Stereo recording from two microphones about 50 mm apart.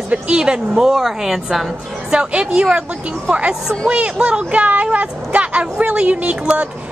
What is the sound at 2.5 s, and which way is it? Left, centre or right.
Speech, right.